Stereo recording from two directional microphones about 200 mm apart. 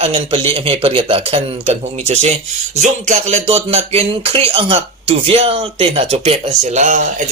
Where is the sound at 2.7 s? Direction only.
35° right (ahead or behind).